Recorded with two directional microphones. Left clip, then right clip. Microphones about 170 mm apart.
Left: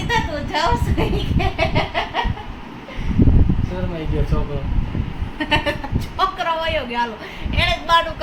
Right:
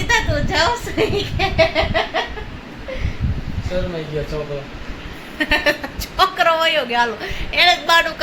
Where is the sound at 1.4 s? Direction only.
55° right (ahead or behind).